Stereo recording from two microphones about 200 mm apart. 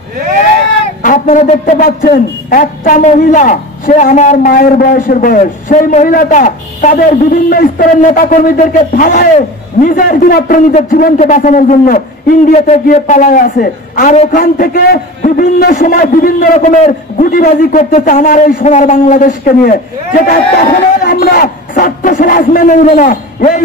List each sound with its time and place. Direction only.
1.0 s a man's voice: 40° left (ahead or behind)